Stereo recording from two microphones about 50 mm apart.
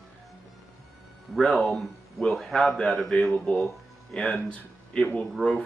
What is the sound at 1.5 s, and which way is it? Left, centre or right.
A man's voice, centre.